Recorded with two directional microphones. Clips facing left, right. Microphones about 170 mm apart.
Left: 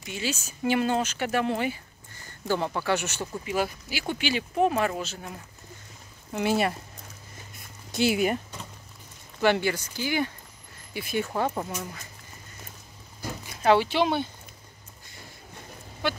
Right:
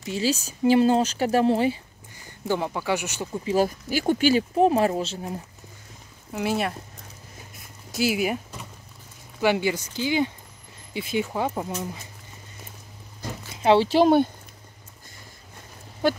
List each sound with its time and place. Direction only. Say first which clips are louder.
0.0 s speech: right 7 dB; 35° right (ahead or behind)
2.2 s speech: right 1 dB; 15° right (ahead or behind)
3.4 s speech: right 7 dB; 40° right (ahead or behind)
6.3 s speech: left 1 dB; centre (ahead or behind)
7.9 s speech: even; 5° right (ahead or behind)
13.6 s a sound: right 3 dB; 25° right (ahead or behind)
13.8 s speech: right 8 dB; 40° right (ahead or behind)
16.0 s speech: right 7 dB; 40° right (ahead or behind)